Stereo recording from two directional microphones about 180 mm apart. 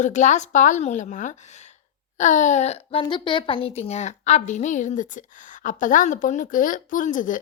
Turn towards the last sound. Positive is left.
turn(degrees=45)  # may be behind; listen again after turning